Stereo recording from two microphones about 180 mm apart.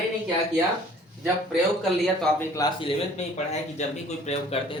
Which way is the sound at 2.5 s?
25° left (ahead or behind).